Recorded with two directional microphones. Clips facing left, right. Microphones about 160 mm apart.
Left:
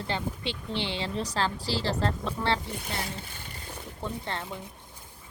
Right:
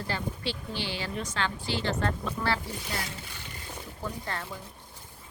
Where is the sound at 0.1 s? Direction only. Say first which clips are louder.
Left 1 dB; 20° left (ahead or behind).